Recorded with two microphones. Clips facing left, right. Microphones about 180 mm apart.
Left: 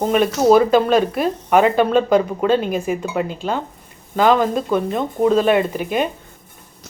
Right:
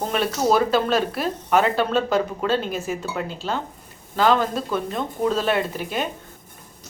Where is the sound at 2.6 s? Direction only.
55° left (ahead or behind).